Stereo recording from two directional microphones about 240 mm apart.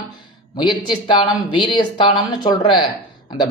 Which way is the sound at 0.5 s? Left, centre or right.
Centre.